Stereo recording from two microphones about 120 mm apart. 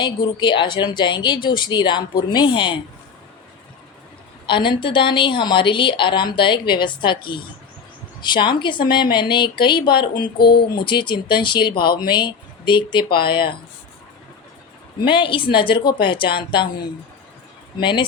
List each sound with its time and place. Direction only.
0.0 s speech: 40° left (ahead or behind)
4.4 s a woman's voice: 45° left (ahead or behind)
15.0 s a woman's voice: 45° left (ahead or behind)
17.7 s speech: 40° left (ahead or behind)